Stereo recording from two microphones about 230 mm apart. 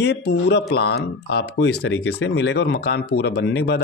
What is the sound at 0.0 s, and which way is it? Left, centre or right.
Speech, left.